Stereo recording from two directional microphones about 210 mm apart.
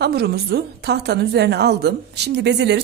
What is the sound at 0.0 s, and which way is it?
A woman's voice, 50° right (ahead or behind).